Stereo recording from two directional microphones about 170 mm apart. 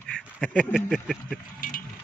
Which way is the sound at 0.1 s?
5° left (ahead or behind).